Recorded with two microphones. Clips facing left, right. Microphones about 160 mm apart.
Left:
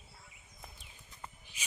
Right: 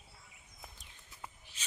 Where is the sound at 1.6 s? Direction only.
10° left (ahead or behind).